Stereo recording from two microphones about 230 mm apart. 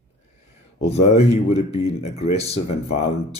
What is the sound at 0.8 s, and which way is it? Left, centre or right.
Speech, left.